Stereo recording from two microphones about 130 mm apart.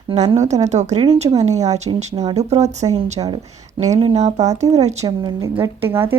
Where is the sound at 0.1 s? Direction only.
60° right (ahead or behind).